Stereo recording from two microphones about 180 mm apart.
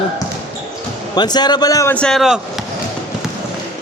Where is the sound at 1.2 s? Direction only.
25° left (ahead or behind).